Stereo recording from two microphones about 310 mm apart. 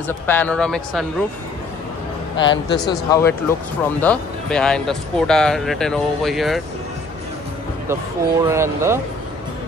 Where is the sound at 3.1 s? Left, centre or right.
Centre.